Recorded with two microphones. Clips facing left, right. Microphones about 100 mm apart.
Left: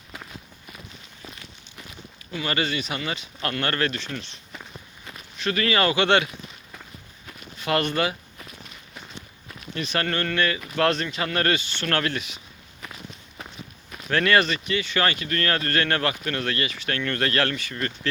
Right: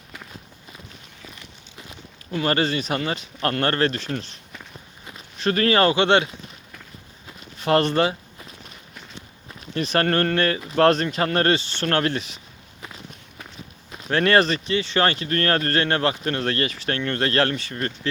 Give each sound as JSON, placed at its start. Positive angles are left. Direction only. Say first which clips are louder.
{"t": 2.3, "sound": "speech", "louder": "right 5 dB", "side_deg": -45}
{"t": 5.4, "sound": "speech", "louder": "right 4 dB", "side_deg": -40}
{"t": 7.6, "sound": "speech", "louder": "right 5 dB", "side_deg": -35}
{"t": 9.7, "sound": "speech", "louder": "right 6 dB", "side_deg": -40}
{"t": 13.9, "sound": "speech", "louder": "right 2 dB", "side_deg": -25}
{"t": 15.8, "sound": "speech", "louder": "right 3 dB", "side_deg": -25}
{"t": 17.0, "sound": "speech", "louder": "right 3 dB", "side_deg": -25}